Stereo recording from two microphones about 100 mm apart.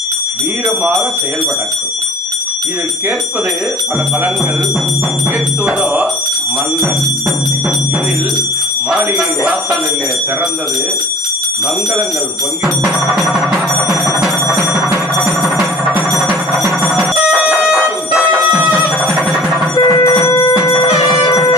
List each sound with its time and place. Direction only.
5.6 s speech: 15° right (ahead or behind)
8.9 s speech: 10° right (ahead or behind)
12.6 s music: 5° right (ahead or behind)
19.7 s a sound: 40° left (ahead or behind)
20.2 s a sound: 30° left (ahead or behind)
20.6 s music: 35° left (ahead or behind)